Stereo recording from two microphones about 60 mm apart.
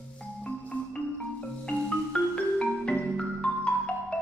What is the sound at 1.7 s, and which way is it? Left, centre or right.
Marimba, centre.